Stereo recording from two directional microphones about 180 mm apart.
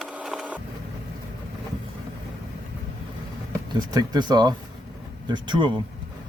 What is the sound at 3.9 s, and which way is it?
Speech, 25° right (ahead or behind).